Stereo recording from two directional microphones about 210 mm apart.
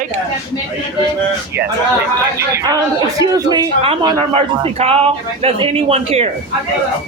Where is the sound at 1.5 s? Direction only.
50° right (ahead or behind).